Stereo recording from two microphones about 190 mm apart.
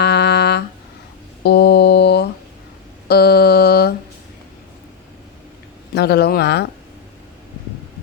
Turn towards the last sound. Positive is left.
turn(degrees=60)  # may be behind; listen again after turning